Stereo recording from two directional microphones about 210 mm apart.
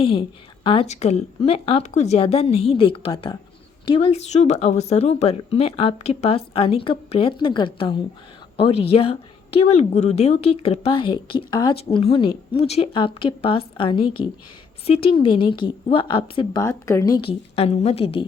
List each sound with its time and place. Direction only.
0.0 s a woman's voice: 25° left (ahead or behind)
17.2 s a woman's voice: 25° left (ahead or behind)